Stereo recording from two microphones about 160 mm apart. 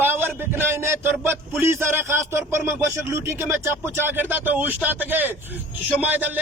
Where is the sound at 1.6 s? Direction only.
15° right (ahead or behind).